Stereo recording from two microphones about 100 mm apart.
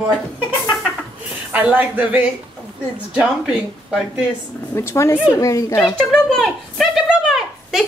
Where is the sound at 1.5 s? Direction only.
15° right (ahead or behind).